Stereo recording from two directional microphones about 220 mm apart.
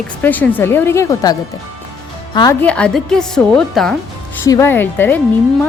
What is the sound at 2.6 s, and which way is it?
A woman's voice, 5° left (ahead or behind).